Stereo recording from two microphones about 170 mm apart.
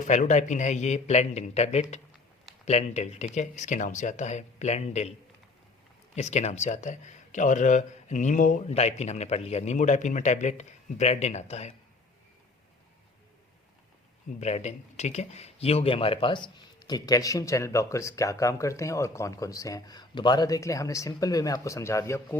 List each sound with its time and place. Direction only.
0.0 s a man's voice: 45° left (ahead or behind)
6.1 s a man's voice: 40° left (ahead or behind)
14.3 s speech: 40° left (ahead or behind); by 22.4 s 15° left (ahead or behind)